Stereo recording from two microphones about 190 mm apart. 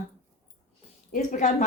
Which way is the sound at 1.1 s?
40° left (ahead or behind).